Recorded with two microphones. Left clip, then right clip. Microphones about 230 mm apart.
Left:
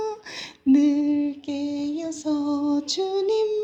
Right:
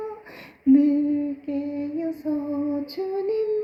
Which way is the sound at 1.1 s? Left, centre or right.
Left.